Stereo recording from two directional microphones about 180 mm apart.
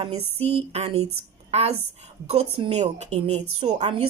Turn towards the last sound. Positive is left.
turn(degrees=-40)  # may be behind; listen again after turning